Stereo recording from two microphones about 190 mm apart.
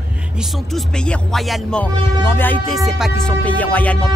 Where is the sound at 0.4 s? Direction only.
Centre (ahead or behind).